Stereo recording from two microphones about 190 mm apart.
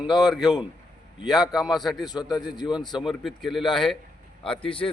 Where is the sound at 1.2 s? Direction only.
20° left (ahead or behind).